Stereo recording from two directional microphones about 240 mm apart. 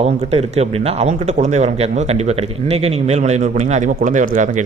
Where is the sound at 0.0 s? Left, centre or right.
Right.